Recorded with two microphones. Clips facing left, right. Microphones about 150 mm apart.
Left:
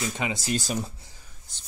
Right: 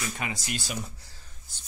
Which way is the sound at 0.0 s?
25° left (ahead or behind).